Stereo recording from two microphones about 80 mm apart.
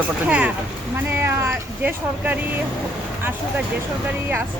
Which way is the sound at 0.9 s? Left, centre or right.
Right.